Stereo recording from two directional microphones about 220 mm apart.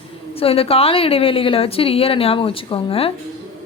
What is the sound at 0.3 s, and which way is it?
A woman's voice, 25° left (ahead or behind).